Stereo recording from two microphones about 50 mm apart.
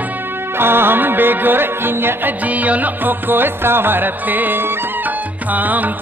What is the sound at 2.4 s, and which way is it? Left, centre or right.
Music, right.